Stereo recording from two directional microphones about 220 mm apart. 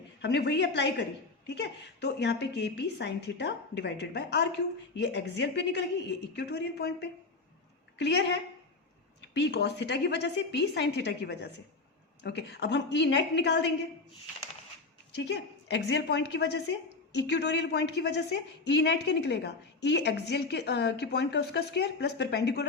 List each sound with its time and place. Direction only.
0.2 s a woman's voice: 50° left (ahead or behind)
15.1 s a woman's voice: 50° left (ahead or behind)